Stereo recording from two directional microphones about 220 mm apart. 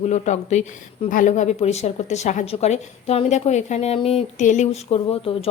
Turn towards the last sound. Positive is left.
turn(degrees=25)  # may be behind; listen again after turning